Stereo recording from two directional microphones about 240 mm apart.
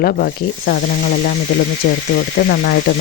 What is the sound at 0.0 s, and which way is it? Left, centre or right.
Speech, left.